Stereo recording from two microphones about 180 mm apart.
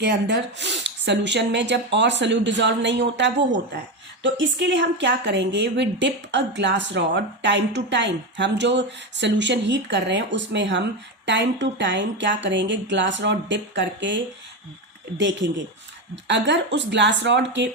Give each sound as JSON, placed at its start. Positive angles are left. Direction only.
{"t": 0.0, "sound": "a woman's voice", "side_deg": -70}
{"t": 4.2, "sound": "a woman's voice", "side_deg": -90}
{"t": 15.2, "sound": "a woman's voice", "side_deg": -80}